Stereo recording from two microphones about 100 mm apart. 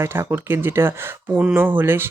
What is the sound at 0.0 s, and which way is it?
Speech, 25° right (ahead or behind).